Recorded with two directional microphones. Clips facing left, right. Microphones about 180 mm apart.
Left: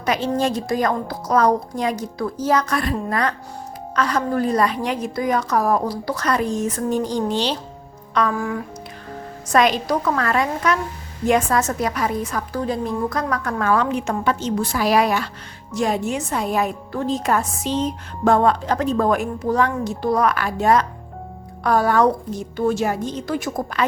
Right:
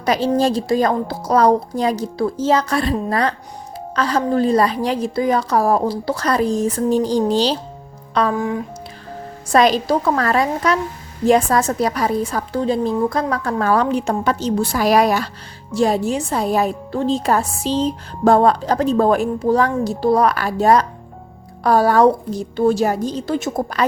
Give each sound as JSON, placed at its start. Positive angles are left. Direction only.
{"t": 0.0, "sound": "speech", "side_deg": -35}
{"t": 9.5, "sound": "speech", "side_deg": -35}